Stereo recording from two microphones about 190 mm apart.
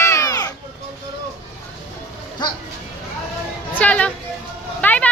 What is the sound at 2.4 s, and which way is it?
Speech, 20° left (ahead or behind).